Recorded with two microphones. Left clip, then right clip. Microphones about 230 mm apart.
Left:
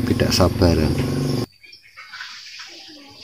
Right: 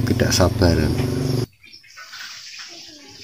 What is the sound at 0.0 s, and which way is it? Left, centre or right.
Speech, centre.